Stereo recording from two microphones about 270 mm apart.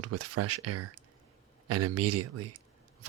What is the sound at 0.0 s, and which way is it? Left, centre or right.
Speech, right.